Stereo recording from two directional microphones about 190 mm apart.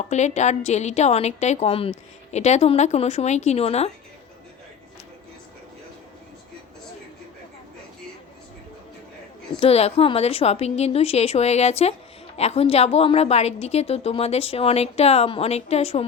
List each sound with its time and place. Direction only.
0.1 s a woman's voice: 35° left (ahead or behind)
9.6 s a woman's voice: 35° left (ahead or behind)